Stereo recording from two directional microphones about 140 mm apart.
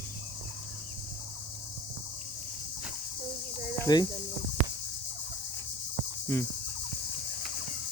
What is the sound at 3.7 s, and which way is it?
Cricket, 25° left (ahead or behind).